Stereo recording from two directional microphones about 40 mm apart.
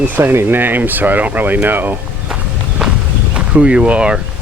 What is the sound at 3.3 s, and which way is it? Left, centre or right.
Speech, right.